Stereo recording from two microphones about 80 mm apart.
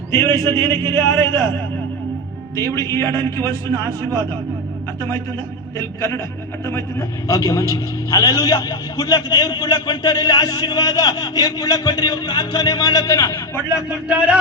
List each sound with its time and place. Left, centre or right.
0.1 s a man's voice: left
2.6 s a man's voice: left
7.3 s a man's voice: left
14.1 s speech: centre